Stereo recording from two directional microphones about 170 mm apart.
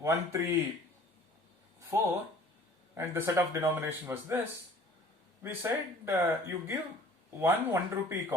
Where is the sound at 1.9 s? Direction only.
15° right (ahead or behind).